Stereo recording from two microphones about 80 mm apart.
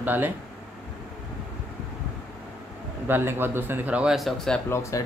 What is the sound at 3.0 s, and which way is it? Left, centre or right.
A man's voice, right.